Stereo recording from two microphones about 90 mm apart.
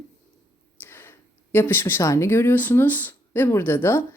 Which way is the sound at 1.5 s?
25° left (ahead or behind).